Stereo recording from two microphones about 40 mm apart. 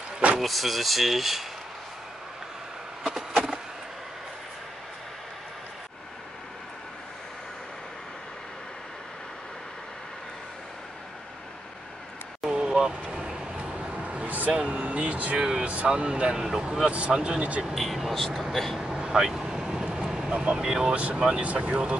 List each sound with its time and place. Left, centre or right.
0.4 s speech: centre
3.2 s a sound: centre
12.4 s vehicle: right
13.6 s a sound: right
13.9 s vehicle: right
15.3 s speech: centre
15.6 s speech: right
16.3 s speech: centre
17.4 s speech: right
17.7 s speech: centre
18.8 s vehicle: right
20.2 s speech: right
20.5 s speech: centre
20.9 s speech: right